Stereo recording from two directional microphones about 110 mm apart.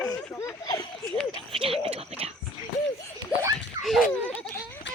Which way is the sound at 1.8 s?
65° right (ahead or behind).